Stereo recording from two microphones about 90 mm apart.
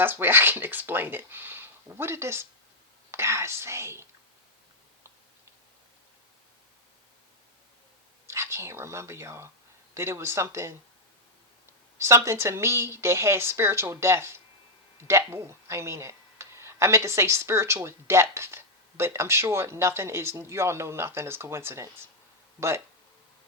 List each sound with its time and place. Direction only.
0.0 s speech: 25° right (ahead or behind)
8.3 s speech: 30° right (ahead or behind)
11.9 s speech: 35° right (ahead or behind)